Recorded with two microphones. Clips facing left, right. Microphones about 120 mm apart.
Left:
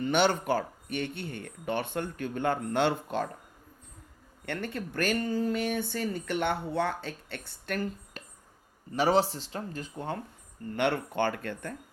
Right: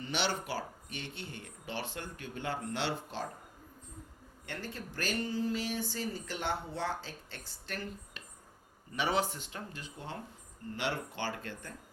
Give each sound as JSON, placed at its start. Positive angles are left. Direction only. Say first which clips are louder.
{"t": 0.0, "sound": "speech", "louder": "left 9 dB", "side_deg": 50}
{"t": 4.4, "sound": "speech", "louder": "left 8 dB", "side_deg": 60}
{"t": 8.9, "sound": "speech", "louder": "left 7 dB", "side_deg": 35}
{"t": 10.8, "sound": "speech", "louder": "left 9 dB", "side_deg": 55}